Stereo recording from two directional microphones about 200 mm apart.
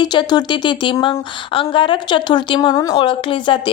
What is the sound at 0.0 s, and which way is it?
A woman's voice, 20° left (ahead or behind).